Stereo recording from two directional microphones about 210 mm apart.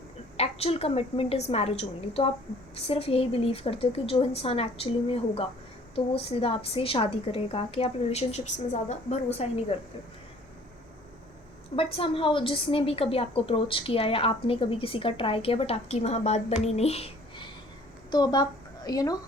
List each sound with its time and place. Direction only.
0.3 s a woman's voice: 30° left (ahead or behind)
11.8 s a woman's voice: 25° left (ahead or behind)
16.6 s a sound: 30° left (ahead or behind)
18.1 s a woman's voice: 20° left (ahead or behind)